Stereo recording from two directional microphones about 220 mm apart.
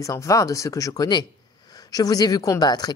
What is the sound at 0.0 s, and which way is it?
Speech, 15° left (ahead or behind).